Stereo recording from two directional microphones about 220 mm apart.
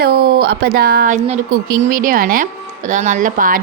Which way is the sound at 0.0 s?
45° right (ahead or behind).